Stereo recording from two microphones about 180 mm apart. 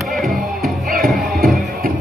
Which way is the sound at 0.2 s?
50° right (ahead or behind).